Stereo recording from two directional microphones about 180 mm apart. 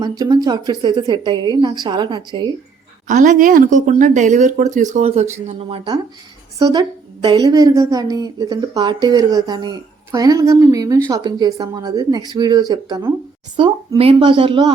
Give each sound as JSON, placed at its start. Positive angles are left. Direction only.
{"t": 0.0, "sound": "a woman's voice", "side_deg": -20}
{"t": 3.1, "sound": "a woman's voice", "side_deg": -45}